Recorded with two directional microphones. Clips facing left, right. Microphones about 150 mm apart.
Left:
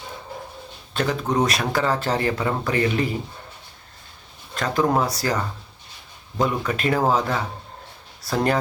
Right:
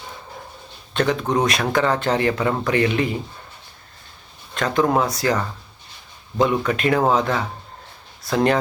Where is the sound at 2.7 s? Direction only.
35° left (ahead or behind).